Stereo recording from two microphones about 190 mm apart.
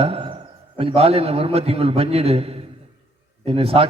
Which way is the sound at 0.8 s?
30° right (ahead or behind).